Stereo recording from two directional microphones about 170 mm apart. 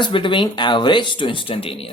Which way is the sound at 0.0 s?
30° left (ahead or behind).